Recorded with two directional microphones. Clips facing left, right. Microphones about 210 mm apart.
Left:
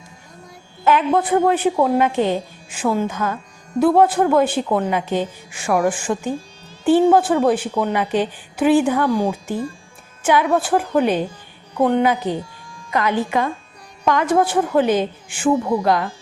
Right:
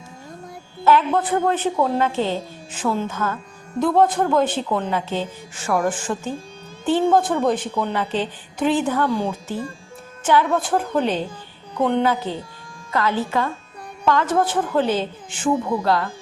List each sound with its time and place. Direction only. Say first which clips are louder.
0.9 s a woman's voice: left 1 dB; 15° left (ahead or behind)